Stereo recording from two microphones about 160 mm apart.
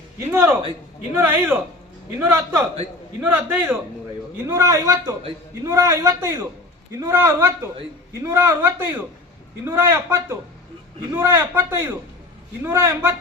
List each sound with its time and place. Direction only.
0.3 s a man's voice: 15° right (ahead or behind)